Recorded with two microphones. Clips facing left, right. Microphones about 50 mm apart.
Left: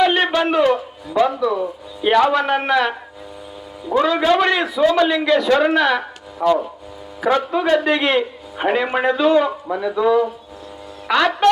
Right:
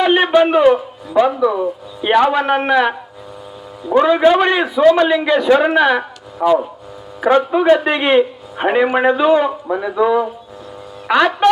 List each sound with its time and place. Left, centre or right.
0.0 s a man's voice: centre
3.9 s a man's voice: centre
7.2 s a man's voice: centre